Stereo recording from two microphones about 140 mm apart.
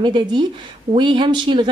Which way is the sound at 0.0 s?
35° right (ahead or behind).